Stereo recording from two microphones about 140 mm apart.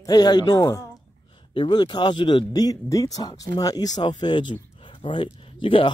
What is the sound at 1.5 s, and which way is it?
Speech, 35° left (ahead or behind).